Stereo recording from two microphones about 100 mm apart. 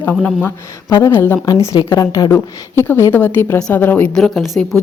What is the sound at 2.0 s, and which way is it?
A woman's voice, 35° left (ahead or behind).